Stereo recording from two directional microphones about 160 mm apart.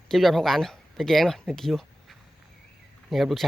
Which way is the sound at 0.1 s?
Centre (ahead or behind).